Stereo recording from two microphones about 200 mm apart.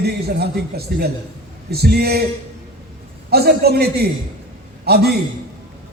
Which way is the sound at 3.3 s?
50° right (ahead or behind).